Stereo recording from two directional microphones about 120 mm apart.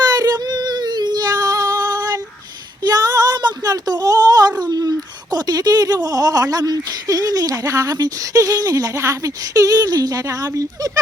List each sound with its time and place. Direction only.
0.1 s female singing: 35° right (ahead or behind)
2.8 s a sound: 30° right (ahead or behind)
4.6 s speech: 35° right (ahead or behind)